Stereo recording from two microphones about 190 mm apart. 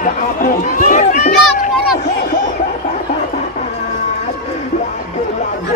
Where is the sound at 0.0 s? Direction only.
45° left (ahead or behind).